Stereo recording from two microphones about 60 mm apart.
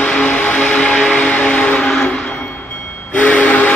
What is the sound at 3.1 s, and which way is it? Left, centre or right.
Steam whistle, left.